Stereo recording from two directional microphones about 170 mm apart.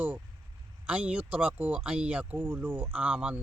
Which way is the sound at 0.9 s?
10° right (ahead or behind).